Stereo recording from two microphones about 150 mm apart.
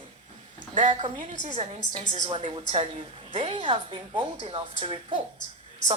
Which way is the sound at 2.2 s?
35° right (ahead or behind).